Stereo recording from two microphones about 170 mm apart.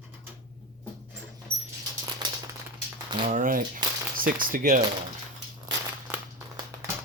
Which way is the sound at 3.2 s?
50° right (ahead or behind).